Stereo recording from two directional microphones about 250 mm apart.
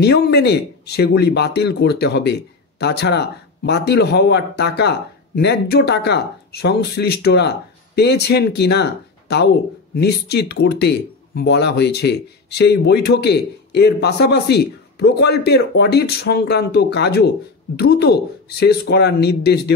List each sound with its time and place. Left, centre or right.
0.0 s speech: left